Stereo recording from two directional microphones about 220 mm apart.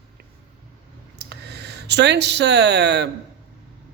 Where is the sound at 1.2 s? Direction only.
50° right (ahead or behind).